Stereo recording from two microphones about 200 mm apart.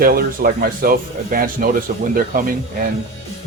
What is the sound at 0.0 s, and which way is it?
Speech, 45° right (ahead or behind).